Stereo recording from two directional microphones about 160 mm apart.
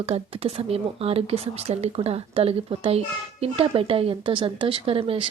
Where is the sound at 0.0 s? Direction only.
40° right (ahead or behind).